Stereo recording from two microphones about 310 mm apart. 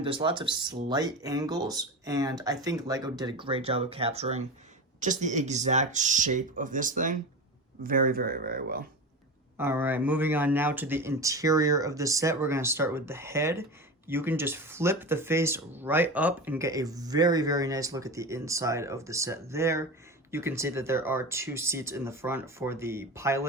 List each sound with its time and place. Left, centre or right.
0.0 s speech: centre
9.6 s speech: centre